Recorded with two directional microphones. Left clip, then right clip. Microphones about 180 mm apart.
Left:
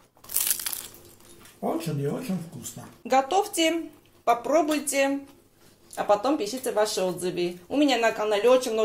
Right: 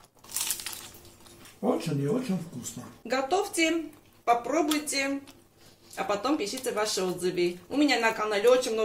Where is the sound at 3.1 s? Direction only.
35° left (ahead or behind).